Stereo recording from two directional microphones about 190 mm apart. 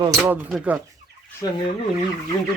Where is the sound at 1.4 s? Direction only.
20° left (ahead or behind).